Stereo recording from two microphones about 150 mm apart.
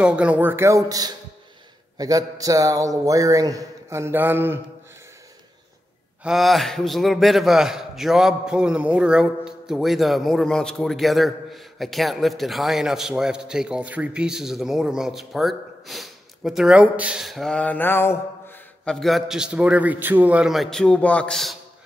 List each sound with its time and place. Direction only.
0.0 s a man's voice: 10° right (ahead or behind)
6.2 s a man's voice: centre (ahead or behind); by 18.6 s 15° left (ahead or behind)
18.9 s a man's voice: centre (ahead or behind)